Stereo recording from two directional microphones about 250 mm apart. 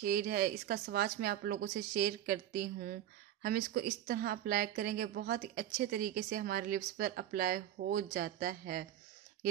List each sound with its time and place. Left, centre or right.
0.0 s speech: right